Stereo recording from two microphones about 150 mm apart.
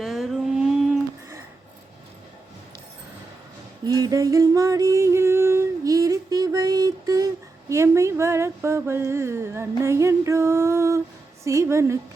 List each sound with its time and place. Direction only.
0.0 s music: centre (ahead or behind)
3.8 s music: 25° right (ahead or behind)
7.7 s a sound: 20° right (ahead or behind)
11.4 s a woman's voice: 20° right (ahead or behind)